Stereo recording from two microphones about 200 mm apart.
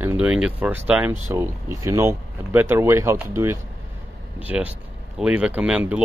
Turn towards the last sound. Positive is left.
turn(degrees=-5)  # may be behind; listen again after turning